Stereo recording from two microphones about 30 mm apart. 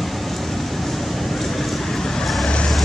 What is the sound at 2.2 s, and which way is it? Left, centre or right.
Vehicle, centre.